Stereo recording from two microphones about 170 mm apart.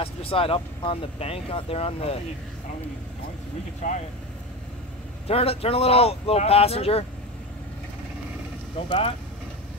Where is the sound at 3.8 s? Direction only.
45° left (ahead or behind).